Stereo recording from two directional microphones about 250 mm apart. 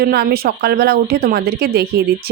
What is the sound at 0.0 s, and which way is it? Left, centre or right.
Speech, right.